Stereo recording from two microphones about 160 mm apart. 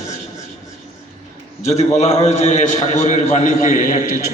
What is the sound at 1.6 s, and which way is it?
A man's voice, 40° left (ahead or behind).